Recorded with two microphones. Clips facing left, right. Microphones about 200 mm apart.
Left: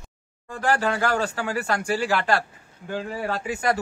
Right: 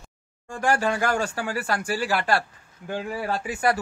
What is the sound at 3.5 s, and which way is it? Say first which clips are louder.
Speech: right 1 dB; 40° left (ahead or behind).